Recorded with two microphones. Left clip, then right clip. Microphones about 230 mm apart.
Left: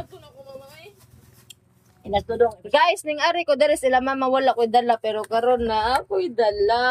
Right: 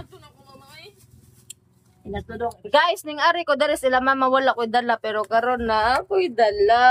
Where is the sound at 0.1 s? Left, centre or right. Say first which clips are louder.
Left 6 dB; right.